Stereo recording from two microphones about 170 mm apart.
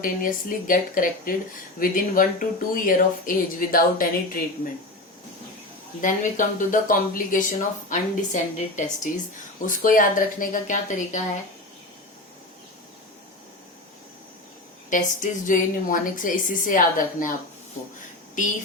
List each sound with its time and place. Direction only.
0.0 s speech: 55° left (ahead or behind)
6.0 s speech: 50° left (ahead or behind)
14.8 s speech: 50° left (ahead or behind)
18.4 s speech: 50° left (ahead or behind)